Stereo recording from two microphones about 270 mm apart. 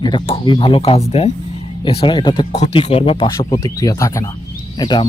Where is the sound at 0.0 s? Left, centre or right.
Centre.